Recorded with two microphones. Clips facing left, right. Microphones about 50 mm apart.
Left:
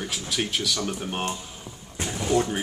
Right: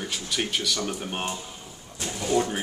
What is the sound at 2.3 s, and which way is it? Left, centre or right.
Speech, centre.